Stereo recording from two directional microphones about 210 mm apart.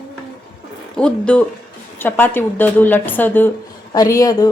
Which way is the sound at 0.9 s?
5° left (ahead or behind).